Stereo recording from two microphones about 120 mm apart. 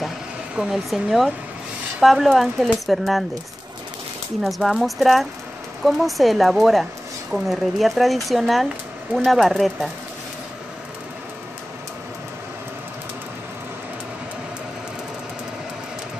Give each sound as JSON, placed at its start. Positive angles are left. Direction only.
{"t": 0.6, "sound": "speech", "side_deg": 0}
{"t": 4.4, "sound": "speech", "side_deg": 0}